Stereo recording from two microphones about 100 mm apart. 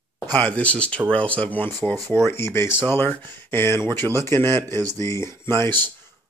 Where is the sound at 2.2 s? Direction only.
25° left (ahead or behind).